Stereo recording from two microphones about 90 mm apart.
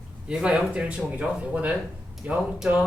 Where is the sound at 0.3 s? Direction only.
10° right (ahead or behind).